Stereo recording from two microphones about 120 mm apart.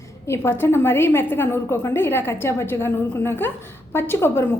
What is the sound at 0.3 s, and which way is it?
A woman's voice, 20° left (ahead or behind).